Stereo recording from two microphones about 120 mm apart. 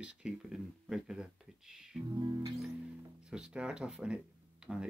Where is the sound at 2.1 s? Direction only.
30° right (ahead or behind).